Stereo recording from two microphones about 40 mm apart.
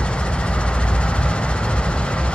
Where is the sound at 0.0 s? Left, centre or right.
Left.